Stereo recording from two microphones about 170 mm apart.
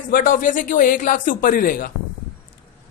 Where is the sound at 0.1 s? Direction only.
55° left (ahead or behind).